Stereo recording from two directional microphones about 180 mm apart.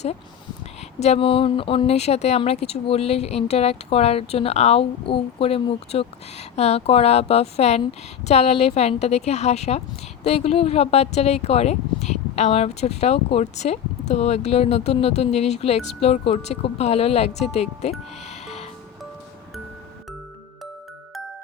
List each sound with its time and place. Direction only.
0.9 s speech: 35° left (ahead or behind)
18.3 s music: 40° left (ahead or behind)